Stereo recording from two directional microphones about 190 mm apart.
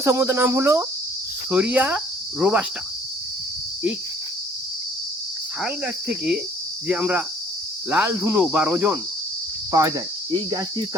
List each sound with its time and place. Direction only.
0.0 s cricket: 15° right (ahead or behind)
5.6 s cricket: 5° right (ahead or behind)